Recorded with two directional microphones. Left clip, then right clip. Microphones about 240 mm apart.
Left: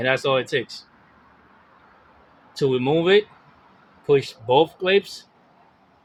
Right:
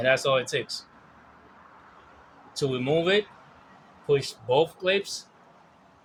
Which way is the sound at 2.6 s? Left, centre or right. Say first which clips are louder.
Left 5 dB; left.